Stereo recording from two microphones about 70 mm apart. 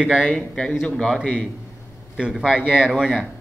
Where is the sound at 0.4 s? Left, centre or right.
Centre.